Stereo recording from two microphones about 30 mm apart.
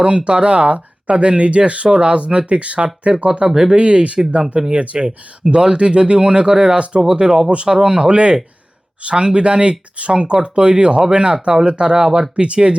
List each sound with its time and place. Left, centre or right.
0.0 s speech: right
6.9 s speech: centre
7.5 s speech: right